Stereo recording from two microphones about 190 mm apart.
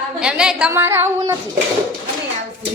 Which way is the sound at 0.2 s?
5° right (ahead or behind).